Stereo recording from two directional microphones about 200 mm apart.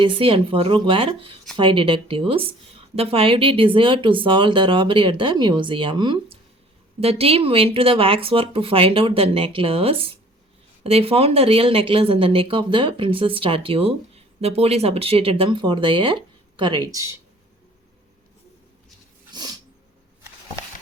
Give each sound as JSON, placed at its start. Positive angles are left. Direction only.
{"t": 0.0, "sound": "speech", "side_deg": -25}
{"t": 19.3, "sound": "dog", "side_deg": -20}